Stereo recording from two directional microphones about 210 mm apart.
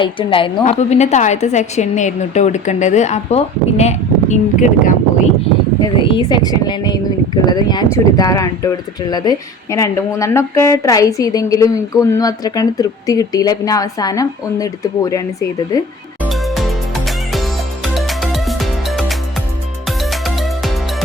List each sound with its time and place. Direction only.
0.0 s a woman's voice: 25° left (ahead or behind)
6.0 s speech: 25° left (ahead or behind)
16.2 s music: centre (ahead or behind)